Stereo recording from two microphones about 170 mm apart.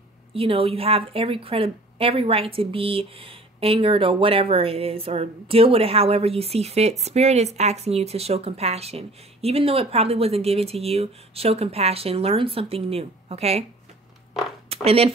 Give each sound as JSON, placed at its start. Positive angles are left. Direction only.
{"t": 0.3, "sound": "a woman's voice", "side_deg": -35}
{"t": 14.7, "sound": "speech", "side_deg": -35}